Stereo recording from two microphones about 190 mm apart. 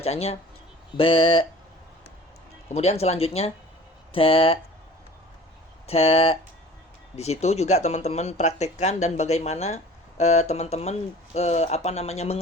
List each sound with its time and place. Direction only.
0.0 s speech: 35° left (ahead or behind)
2.7 s speech: 35° left (ahead or behind)
5.9 s speech: 30° left (ahead or behind)